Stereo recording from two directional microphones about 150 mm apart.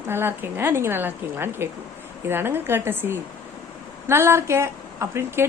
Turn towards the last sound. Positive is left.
turn(degrees=-15)  # may be behind; listen again after turning